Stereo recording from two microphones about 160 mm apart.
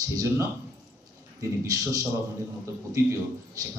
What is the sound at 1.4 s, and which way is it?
A man's voice, 20° right (ahead or behind).